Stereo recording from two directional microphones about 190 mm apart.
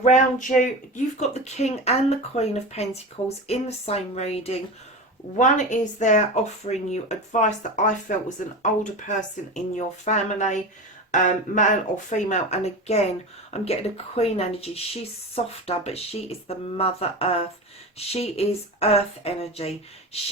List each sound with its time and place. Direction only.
0.0 s speech: 40° left (ahead or behind)